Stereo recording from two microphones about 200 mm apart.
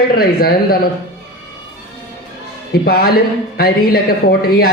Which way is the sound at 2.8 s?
50° left (ahead or behind).